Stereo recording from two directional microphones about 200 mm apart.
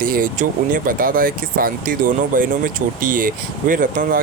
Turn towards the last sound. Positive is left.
turn(degrees=-40)  # may be behind; listen again after turning